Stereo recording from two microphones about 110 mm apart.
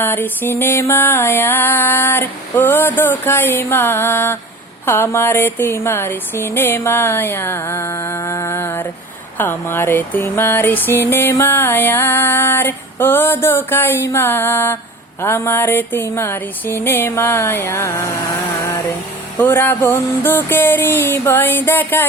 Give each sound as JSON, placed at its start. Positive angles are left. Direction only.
{"t": 0.0, "sound": "music", "side_deg": 20}
{"t": 19.4, "sound": "music", "side_deg": 20}